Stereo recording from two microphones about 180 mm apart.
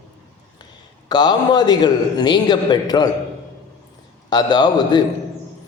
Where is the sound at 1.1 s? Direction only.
25° left (ahead or behind).